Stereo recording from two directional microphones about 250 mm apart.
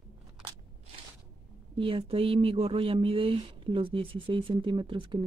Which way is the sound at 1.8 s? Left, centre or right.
Right.